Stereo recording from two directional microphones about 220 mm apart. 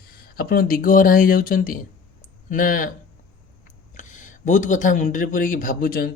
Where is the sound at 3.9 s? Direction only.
35° left (ahead or behind).